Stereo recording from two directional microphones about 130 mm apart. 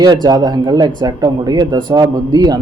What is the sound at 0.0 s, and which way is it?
Speech, 30° right (ahead or behind).